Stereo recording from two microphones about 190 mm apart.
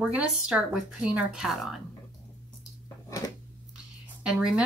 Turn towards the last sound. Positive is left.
turn(degrees=-5)  # may be behind; listen again after turning